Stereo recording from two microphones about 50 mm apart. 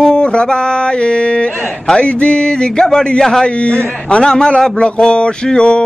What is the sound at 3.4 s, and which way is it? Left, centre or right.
A man's voice, left.